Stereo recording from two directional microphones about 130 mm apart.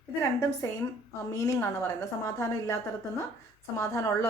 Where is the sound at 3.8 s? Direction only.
25° left (ahead or behind).